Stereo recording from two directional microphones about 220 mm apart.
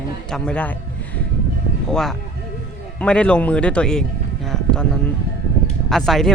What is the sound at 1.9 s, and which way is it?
Speech, centre (ahead or behind).